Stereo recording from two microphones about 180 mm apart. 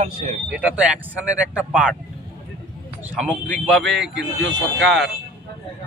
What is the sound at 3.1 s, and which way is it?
Speech, centre (ahead or behind).